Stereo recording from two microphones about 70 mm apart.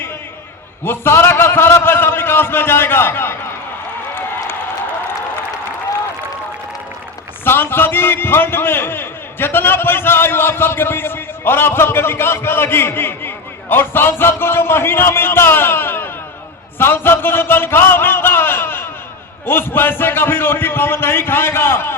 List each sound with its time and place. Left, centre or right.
0.9 s a man's voice: left
7.4 s a man's voice: left